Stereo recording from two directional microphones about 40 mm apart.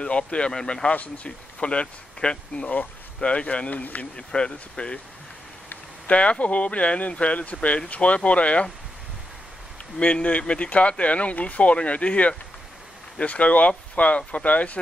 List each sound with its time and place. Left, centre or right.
0.0 s speech: left
3.8 s speech: left
4.3 s speech: left
6.0 s speech: left
9.9 s speech: left